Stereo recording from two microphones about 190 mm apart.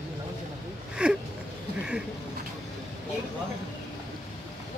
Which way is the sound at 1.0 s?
5° right (ahead or behind).